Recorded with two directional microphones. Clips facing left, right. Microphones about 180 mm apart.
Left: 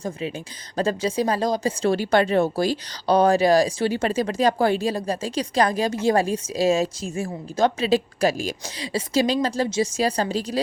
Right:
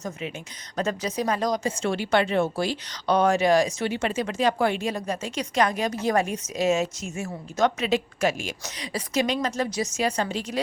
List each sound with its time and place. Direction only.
0.0 s speech: 30° left (ahead or behind)